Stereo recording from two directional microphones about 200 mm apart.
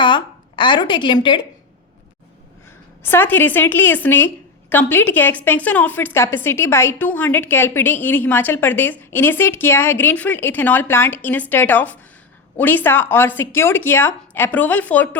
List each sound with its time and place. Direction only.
0.0 s a woman's voice: 25° left (ahead or behind)
2.6 s a woman's voice: 10° left (ahead or behind)